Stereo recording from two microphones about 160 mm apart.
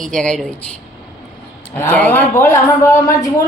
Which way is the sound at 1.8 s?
10° left (ahead or behind).